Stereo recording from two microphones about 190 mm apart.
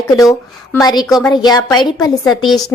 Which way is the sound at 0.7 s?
20° left (ahead or behind).